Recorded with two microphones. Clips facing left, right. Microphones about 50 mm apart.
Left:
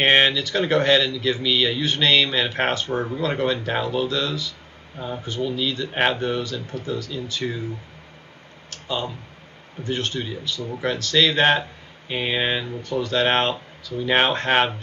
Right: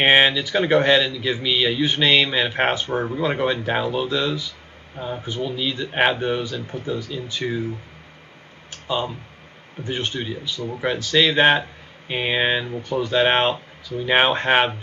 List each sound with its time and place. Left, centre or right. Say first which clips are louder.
0.0 s speech: right 2 dB; centre
8.6 s clicking: right 3 dB; centre
9.8 s speech: even; centre